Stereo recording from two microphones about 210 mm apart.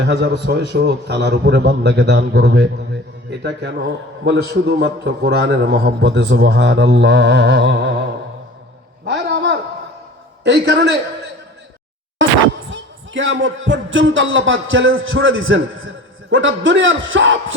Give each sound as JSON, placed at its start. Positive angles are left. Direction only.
{"t": 0.0, "sound": "a man's voice", "side_deg": -55}
{"t": 9.0, "sound": "a sound", "side_deg": -55}
{"t": 10.4, "sound": "a man's voice", "side_deg": -55}
{"t": 12.7, "sound": "a man's voice", "side_deg": -60}